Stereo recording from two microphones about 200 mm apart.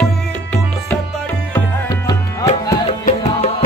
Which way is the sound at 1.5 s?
20° left (ahead or behind).